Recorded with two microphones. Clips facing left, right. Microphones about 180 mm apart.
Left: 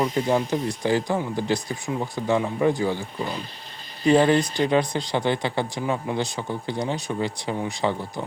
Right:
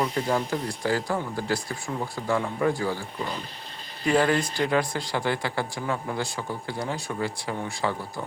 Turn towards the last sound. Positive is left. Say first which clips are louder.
# left 4 dB
turn(degrees=20)  # may be behind; listen again after turning